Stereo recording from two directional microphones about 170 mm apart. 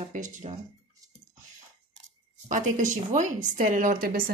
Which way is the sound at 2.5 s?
50° right (ahead or behind).